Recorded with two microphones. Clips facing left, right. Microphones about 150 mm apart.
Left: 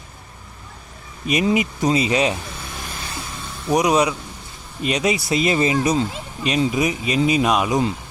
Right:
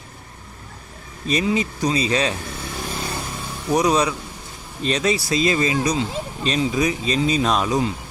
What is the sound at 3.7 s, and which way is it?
Speech, 20° left (ahead or behind).